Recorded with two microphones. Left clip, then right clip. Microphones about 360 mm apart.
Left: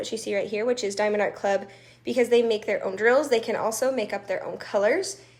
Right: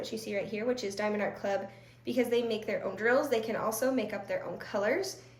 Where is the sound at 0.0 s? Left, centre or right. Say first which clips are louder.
Left 8 dB; centre.